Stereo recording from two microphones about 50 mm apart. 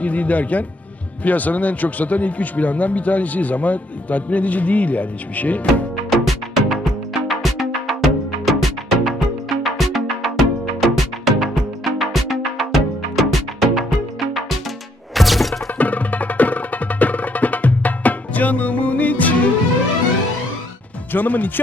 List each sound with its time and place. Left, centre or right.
0.0 s speech: left
6.1 s music: centre
15.1 s music: centre
15.8 s music: left
21.1 s speech: left